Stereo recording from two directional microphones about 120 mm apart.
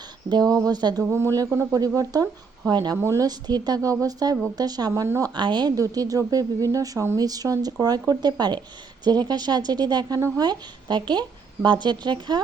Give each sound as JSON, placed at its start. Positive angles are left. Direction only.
{"t": 0.3, "sound": "a woman's voice", "side_deg": -35}
{"t": 1.0, "sound": "a woman's voice", "side_deg": -20}
{"t": 5.3, "sound": "a woman's voice", "side_deg": -40}